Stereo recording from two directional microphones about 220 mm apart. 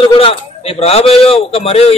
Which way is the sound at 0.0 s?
25° left (ahead or behind).